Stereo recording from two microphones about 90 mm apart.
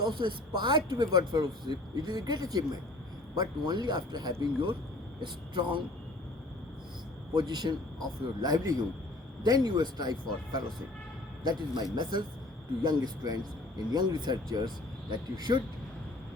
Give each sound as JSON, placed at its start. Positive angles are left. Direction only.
{"t": 0.1, "sound": "speech", "side_deg": -65}
{"t": 7.3, "sound": "speech", "side_deg": -55}